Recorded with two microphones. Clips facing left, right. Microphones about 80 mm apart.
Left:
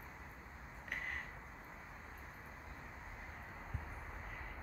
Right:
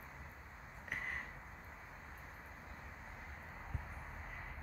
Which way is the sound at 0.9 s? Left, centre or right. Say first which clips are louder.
Right 1 dB; centre.